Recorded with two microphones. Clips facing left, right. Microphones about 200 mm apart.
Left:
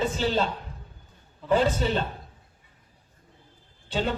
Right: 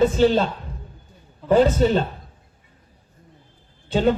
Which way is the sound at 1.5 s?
45° right (ahead or behind).